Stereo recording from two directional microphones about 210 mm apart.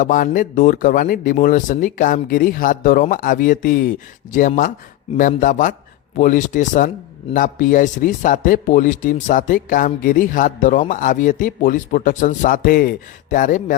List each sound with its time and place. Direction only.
0.0 s a man's voice: 40° left (ahead or behind)